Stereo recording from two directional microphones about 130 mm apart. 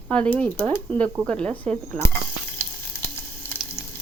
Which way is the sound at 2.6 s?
10° left (ahead or behind).